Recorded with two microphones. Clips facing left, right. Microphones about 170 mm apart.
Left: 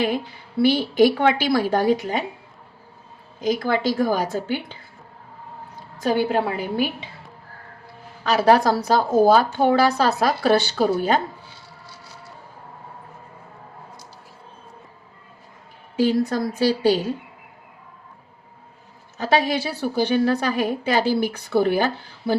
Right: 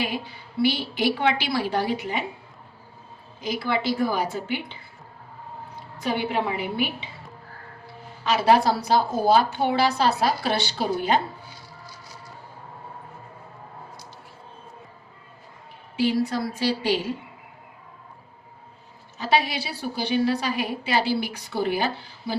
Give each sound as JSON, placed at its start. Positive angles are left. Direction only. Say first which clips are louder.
{"t": 0.0, "sound": "a woman's voice", "louder": "left 6 dB", "side_deg": 55}
{"t": 3.4, "sound": "a woman's voice", "louder": "left 5 dB", "side_deg": 45}
{"t": 6.0, "sound": "a woman's voice", "louder": "left 5 dB", "side_deg": 40}
{"t": 8.3, "sound": "a woman's voice", "louder": "left 3 dB", "side_deg": 45}
{"t": 11.4, "sound": "chopping", "louder": "right 1 dB", "side_deg": 30}
{"t": 16.0, "sound": "a woman's voice", "louder": "left 3 dB", "side_deg": 45}
{"t": 19.1, "sound": "a woman's voice", "louder": "left 3 dB", "side_deg": 45}